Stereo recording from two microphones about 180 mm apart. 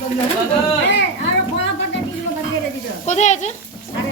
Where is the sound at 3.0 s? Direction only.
40° left (ahead or behind).